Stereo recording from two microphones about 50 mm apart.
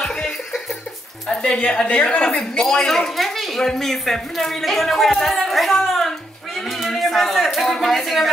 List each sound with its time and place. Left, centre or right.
0.0 s music: centre
1.3 s a woman's voice: centre
2.5 s speech: centre